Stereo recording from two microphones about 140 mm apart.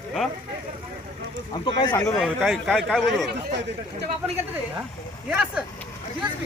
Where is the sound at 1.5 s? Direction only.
35° left (ahead or behind).